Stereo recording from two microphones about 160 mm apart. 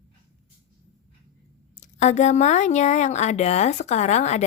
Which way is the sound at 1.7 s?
50° left (ahead or behind).